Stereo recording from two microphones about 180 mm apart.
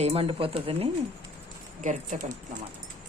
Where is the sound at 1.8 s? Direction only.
45° right (ahead or behind).